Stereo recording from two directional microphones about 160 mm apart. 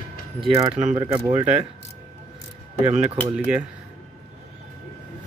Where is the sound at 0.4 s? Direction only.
25° right (ahead or behind).